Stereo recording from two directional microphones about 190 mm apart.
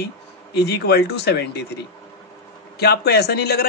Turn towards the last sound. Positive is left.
turn(degrees=55)  # may be behind; listen again after turning